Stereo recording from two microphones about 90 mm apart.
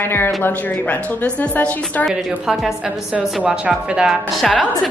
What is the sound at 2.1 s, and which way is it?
A woman's voice, 5° right (ahead or behind).